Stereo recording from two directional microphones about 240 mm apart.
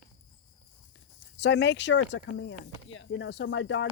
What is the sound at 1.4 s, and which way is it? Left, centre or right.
Speech, left.